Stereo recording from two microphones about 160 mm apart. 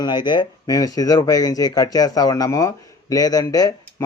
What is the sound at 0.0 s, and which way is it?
Speech, 30° left (ahead or behind).